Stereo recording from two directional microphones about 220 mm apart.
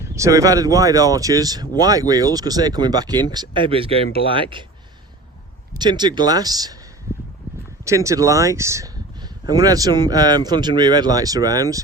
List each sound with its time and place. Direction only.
0.0 s speech: 15° right (ahead or behind)
5.7 s speech: 20° right (ahead or behind)
7.9 s speech: 15° right (ahead or behind)